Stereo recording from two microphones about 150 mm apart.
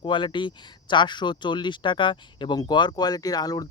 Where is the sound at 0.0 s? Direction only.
35° left (ahead or behind).